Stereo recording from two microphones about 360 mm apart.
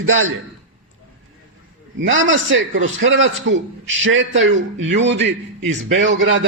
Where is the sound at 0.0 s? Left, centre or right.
Right.